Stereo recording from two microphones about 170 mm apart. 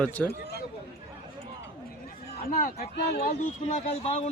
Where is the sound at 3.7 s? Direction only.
40° left (ahead or behind).